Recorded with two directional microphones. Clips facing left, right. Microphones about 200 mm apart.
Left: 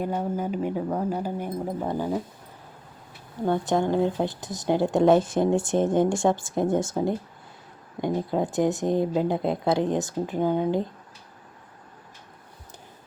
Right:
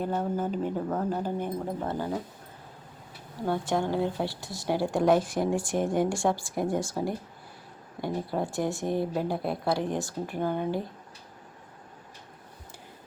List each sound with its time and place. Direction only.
0.0 s speech: 10° left (ahead or behind)
3.4 s a woman's voice: 20° left (ahead or behind)